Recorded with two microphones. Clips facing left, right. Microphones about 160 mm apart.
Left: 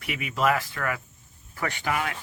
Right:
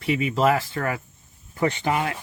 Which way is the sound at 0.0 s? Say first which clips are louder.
Right 5 dB; 30° right (ahead or behind).